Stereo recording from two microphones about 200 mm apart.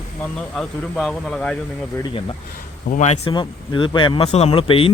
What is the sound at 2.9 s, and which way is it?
A man's voice, 35° left (ahead or behind).